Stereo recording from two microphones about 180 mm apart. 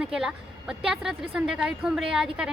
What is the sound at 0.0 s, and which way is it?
A woman's voice, 5° right (ahead or behind).